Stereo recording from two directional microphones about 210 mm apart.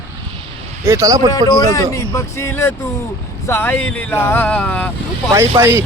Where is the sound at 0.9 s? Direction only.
15° right (ahead or behind).